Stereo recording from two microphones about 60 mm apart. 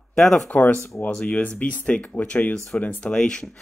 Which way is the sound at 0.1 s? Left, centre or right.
Centre.